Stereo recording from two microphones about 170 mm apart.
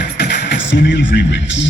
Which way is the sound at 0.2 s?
85° left.